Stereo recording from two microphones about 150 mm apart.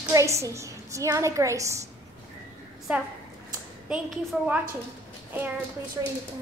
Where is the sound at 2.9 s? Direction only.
5° right (ahead or behind).